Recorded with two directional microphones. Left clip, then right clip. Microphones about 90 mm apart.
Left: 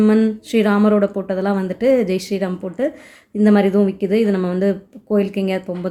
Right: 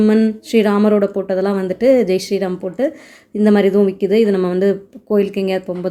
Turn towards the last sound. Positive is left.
turn(degrees=-25)  # may be behind; listen again after turning